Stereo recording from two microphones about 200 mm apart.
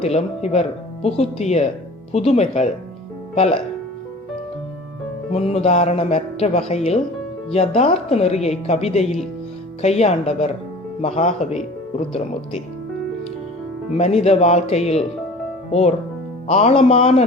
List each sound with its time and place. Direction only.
0.0 s a woman's voice: 35° left (ahead or behind)
5.3 s a woman's voice: 30° left (ahead or behind)
13.9 s a woman's voice: 30° left (ahead or behind)